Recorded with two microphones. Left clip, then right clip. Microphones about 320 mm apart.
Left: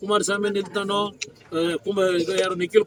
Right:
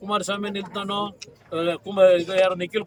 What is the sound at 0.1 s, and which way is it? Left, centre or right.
Speech, centre.